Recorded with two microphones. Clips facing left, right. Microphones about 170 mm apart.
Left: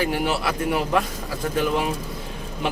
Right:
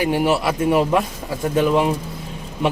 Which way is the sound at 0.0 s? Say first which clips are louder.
Right 5 dB; 20° right (ahead or behind).